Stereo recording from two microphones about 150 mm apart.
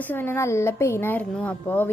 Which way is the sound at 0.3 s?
20° left (ahead or behind).